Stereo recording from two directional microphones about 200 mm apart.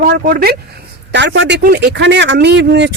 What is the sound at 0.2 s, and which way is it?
Speech, 45° right (ahead or behind).